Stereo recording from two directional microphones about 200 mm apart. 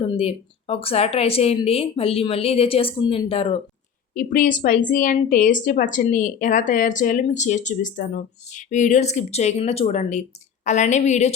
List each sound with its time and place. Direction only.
0.0 s speech: 30° left (ahead or behind)
4.1 s a woman's voice: 45° left (ahead or behind)